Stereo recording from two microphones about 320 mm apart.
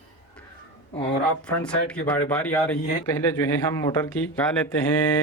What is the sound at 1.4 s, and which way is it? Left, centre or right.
Speech, centre.